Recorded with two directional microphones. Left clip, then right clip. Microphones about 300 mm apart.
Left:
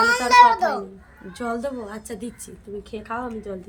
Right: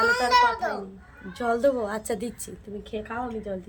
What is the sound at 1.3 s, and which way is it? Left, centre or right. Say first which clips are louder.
A woman's voice: right 5 dB; centre.